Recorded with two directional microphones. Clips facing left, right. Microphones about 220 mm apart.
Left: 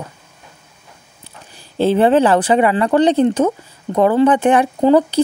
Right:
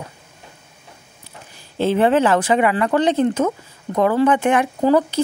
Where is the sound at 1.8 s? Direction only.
35° left (ahead or behind).